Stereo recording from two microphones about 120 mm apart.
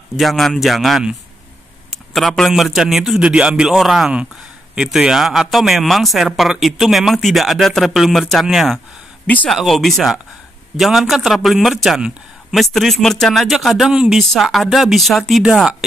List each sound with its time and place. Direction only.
0.1 s a man's voice: centre (ahead or behind)
2.1 s a man's voice: centre (ahead or behind)